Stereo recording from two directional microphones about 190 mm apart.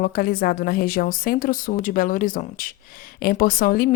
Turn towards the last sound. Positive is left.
turn(degrees=50)  # may be behind; listen again after turning